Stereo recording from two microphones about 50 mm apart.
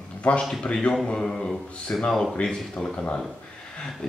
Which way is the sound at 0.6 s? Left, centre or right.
Centre.